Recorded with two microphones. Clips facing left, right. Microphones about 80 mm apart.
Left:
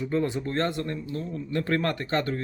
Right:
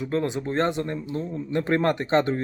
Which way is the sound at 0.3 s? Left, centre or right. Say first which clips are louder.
Right 3 dB; centre.